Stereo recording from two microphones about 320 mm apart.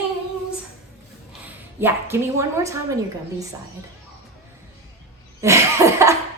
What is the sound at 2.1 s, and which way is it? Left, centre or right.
Speech, centre.